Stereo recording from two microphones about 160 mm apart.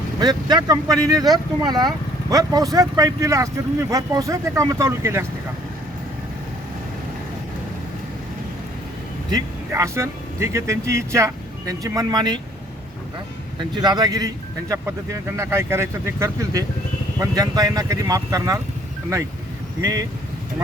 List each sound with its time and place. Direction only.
0.2 s speech: 25° right (ahead or behind)
9.3 s speech: 20° right (ahead or behind)
13.6 s speech: 25° right (ahead or behind)
19.8 s speech: 25° right (ahead or behind)